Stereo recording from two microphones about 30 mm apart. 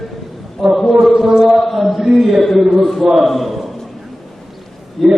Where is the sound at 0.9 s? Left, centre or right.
Centre.